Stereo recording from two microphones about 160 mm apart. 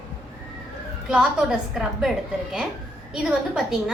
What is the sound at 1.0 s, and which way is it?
A woman's voice, 5° right (ahead or behind).